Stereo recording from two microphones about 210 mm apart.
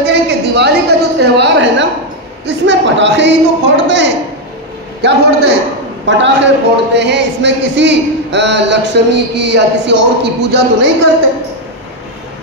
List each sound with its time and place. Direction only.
0.0 s a woman's voice: 55° right (ahead or behind)